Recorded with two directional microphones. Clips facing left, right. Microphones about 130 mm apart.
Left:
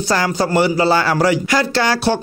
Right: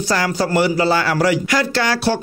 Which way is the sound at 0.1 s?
30° left (ahead or behind).